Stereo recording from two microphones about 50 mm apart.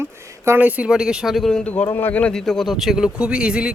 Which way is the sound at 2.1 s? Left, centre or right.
Left.